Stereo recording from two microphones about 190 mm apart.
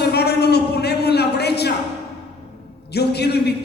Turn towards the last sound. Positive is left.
turn(degrees=60)  # may be behind; listen again after turning